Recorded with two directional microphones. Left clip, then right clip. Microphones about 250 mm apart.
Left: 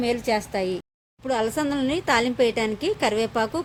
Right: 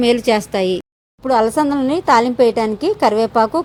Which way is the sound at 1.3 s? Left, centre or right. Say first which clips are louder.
Right 10 dB; centre.